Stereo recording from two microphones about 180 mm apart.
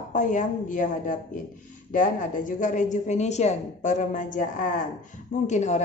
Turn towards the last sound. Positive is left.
turn(degrees=40)  # may be behind; listen again after turning